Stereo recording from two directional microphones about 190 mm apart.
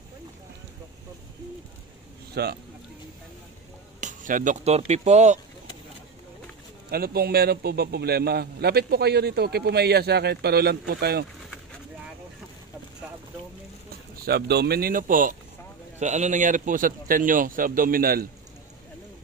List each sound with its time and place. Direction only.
2.4 s a man's voice: 55° right (ahead or behind)
4.0 s speech: 45° right (ahead or behind)
6.9 s a man's voice: 55° right (ahead or behind)
14.2 s a man's voice: 55° right (ahead or behind)